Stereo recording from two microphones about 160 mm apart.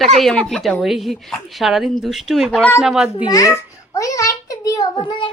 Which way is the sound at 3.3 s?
20° left (ahead or behind).